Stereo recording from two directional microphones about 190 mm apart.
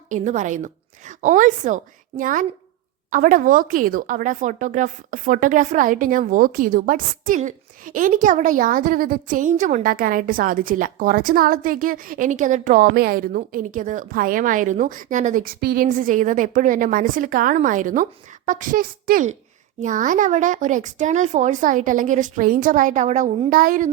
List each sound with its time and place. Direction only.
0.1 s a woman's voice: 40° right (ahead or behind)